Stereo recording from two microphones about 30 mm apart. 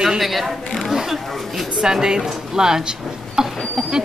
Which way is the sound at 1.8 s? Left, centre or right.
Right.